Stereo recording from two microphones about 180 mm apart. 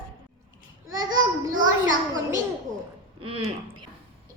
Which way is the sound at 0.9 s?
20° right (ahead or behind).